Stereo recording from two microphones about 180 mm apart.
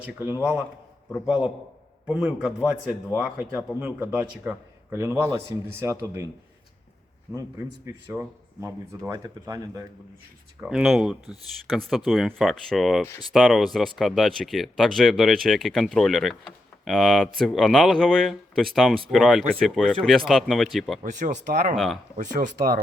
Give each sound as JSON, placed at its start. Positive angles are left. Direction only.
{"t": 0.0, "sound": "speech", "side_deg": -10}
{"t": 2.0, "sound": "speech", "side_deg": -5}
{"t": 7.9, "sound": "speech", "side_deg": -15}
{"t": 10.6, "sound": "speech", "side_deg": -5}
{"t": 21.0, "sound": "speech", "side_deg": -45}